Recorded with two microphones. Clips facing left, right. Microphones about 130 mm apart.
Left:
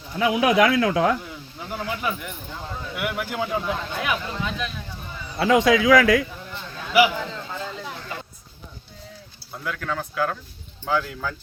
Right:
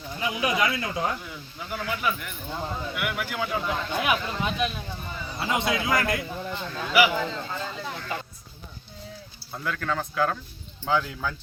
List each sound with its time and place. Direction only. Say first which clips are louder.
0.2 s speech: left 8 dB; 85° left
1.5 s speech: left 2 dB; 30° left (ahead or behind)
4.0 s speech: right 1 dB; 15° right (ahead or behind)
5.4 s speech: left 9 dB; 90° left
7.1 s speech: right 2 dB; centre (ahead or behind)
9.5 s speech: even; 5° left (ahead or behind)